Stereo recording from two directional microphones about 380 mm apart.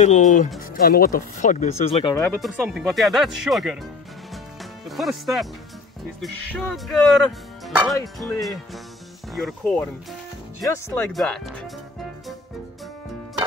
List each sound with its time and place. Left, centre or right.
0.0 s speech: centre
4.8 s speech: centre